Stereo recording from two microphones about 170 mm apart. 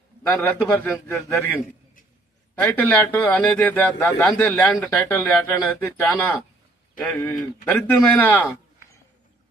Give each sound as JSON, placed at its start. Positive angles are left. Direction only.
{"t": 0.2, "sound": "a man's voice", "side_deg": 10}
{"t": 2.6, "sound": "a man's voice", "side_deg": 10}